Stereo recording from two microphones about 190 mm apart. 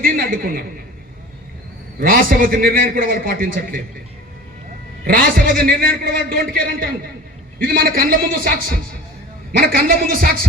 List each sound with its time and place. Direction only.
0.0 s a man's voice: 50° right (ahead or behind)
2.0 s a man's voice: 50° right (ahead or behind)
5.0 s a man's voice: 50° right (ahead or behind)